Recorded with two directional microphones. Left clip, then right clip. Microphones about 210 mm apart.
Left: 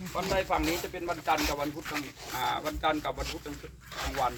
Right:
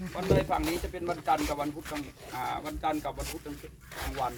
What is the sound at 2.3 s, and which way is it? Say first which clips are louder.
Speech: left 3 dB; 15° right (ahead or behind).